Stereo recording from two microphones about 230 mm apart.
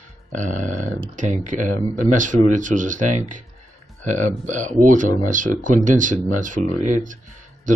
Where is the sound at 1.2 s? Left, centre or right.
Right.